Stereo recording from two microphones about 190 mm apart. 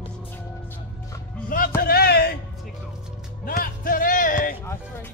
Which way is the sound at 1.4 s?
50° left (ahead or behind).